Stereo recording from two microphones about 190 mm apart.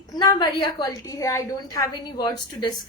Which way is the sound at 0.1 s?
20° left (ahead or behind).